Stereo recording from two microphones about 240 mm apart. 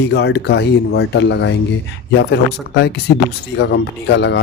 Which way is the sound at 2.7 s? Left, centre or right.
Left.